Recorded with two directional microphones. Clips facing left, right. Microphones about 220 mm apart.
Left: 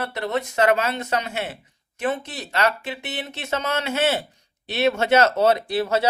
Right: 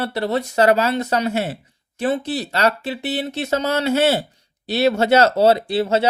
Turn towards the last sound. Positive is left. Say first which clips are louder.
# right 3 dB
turn(degrees=-25)  # may be behind; listen again after turning